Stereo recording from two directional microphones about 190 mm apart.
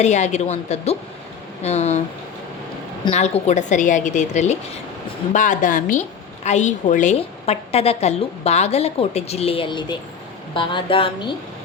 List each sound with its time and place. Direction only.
0.0 s a woman's voice: 35° left (ahead or behind)
3.1 s a woman's voice: 35° left (ahead or behind)